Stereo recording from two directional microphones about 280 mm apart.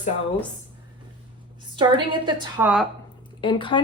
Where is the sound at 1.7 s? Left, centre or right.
Centre.